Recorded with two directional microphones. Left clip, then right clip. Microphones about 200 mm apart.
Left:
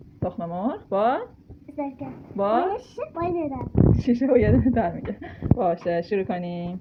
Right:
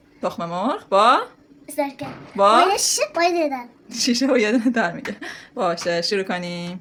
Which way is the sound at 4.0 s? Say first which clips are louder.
Right 4 dB; 10° right (ahead or behind).